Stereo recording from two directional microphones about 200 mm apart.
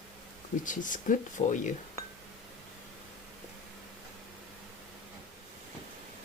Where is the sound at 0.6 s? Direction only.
40° left (ahead or behind).